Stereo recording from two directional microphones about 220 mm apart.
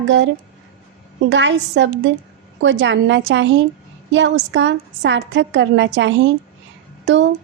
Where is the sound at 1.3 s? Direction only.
55° right (ahead or behind).